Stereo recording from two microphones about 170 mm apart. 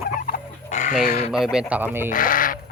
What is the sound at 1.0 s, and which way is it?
Speech, 45° left (ahead or behind).